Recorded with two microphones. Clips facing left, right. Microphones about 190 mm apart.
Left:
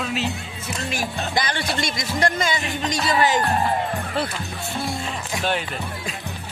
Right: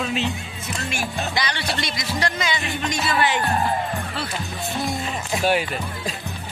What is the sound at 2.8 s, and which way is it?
Music, 40° left (ahead or behind).